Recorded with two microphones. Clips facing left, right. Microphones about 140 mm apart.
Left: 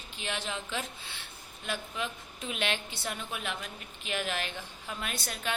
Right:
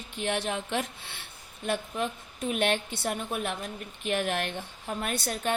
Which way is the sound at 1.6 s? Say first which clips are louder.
Right 6 dB; 50° right (ahead or behind).